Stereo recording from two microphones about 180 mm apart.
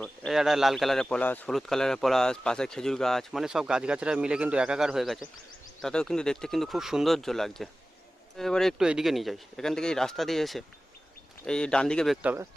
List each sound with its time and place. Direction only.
0.0 s speech: centre (ahead or behind)